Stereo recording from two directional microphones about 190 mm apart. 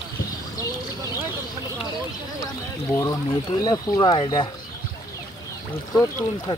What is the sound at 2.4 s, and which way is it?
Speech, 20° left (ahead or behind).